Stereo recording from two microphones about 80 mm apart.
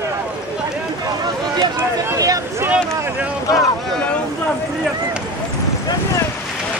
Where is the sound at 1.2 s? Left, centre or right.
Right.